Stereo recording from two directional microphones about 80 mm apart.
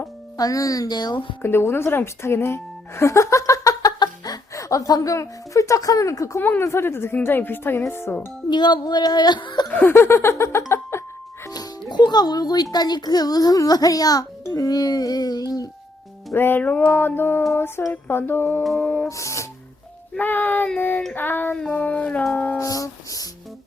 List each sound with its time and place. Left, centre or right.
0.3 s speech: left
1.4 s a woman's voice: left
6.4 s speech: left
8.4 s speech: left
9.7 s a sound: left
10.9 s music: left
11.9 s a child's voice: left
16.3 s speech: left
19.0 s a sound: left
20.1 s speech: left
21.5 s a sound: centre
22.3 s speech: left
22.5 s speech: left